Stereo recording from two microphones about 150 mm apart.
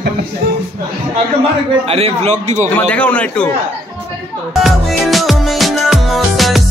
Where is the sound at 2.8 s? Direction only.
10° left (ahead or behind).